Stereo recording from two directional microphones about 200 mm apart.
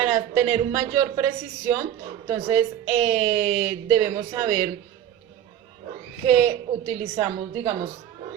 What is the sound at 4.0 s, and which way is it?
Speech, 20° right (ahead or behind).